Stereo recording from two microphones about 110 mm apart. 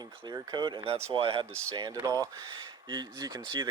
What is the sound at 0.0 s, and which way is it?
Speech, 40° right (ahead or behind).